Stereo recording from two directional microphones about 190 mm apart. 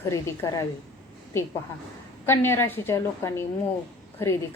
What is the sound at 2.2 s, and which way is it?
A woman's voice, 10° left (ahead or behind).